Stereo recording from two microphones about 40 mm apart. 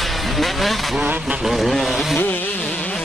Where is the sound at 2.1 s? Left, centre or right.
Left.